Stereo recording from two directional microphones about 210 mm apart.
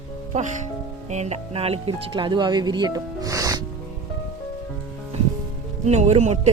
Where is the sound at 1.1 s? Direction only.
30° right (ahead or behind); by 3.6 s 15° right (ahead or behind).